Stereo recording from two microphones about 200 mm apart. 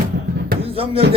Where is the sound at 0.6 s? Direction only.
30° right (ahead or behind).